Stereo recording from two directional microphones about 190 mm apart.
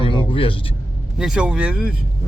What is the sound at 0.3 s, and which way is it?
Speech, 25° left (ahead or behind).